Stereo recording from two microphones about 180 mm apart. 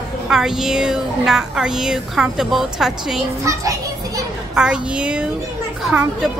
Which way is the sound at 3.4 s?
20° right (ahead or behind).